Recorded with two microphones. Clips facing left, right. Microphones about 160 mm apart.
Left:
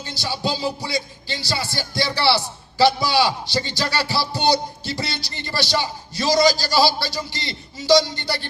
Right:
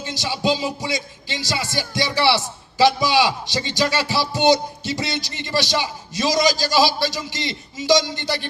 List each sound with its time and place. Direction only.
0.0 s a man's voice: 20° right (ahead or behind)